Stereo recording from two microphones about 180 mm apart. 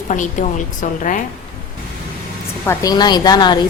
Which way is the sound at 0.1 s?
45° left (ahead or behind).